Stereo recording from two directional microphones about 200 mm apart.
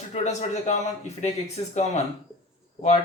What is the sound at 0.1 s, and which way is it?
Speech, 35° left (ahead or behind).